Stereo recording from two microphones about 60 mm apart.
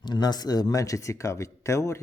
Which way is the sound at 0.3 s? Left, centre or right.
Left.